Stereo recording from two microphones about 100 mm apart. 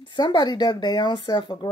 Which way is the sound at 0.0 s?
50° left (ahead or behind).